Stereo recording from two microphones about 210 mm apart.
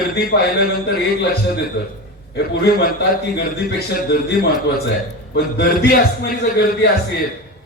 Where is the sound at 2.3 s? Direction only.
50° left (ahead or behind).